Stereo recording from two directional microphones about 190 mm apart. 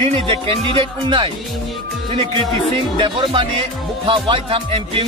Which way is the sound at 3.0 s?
25° right (ahead or behind).